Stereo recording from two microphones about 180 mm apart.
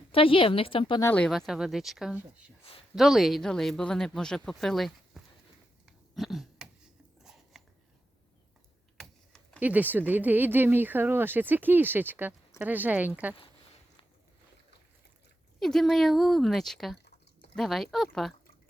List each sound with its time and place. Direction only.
0.1 s a woman's voice: 30° left (ahead or behind)
1.0 s speech: 5° left (ahead or behind)
6.1 s a sound: centre (ahead or behind)
9.6 s speech: 10° right (ahead or behind)
15.6 s speech: centre (ahead or behind)